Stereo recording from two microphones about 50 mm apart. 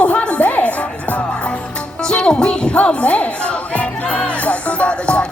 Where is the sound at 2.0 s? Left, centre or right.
Centre.